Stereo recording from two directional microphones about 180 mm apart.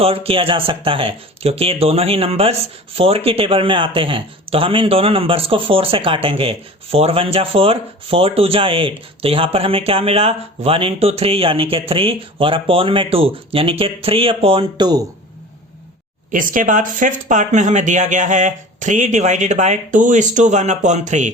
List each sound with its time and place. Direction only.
0.0 s speech: 35° right (ahead or behind)
16.3 s speech: 50° right (ahead or behind)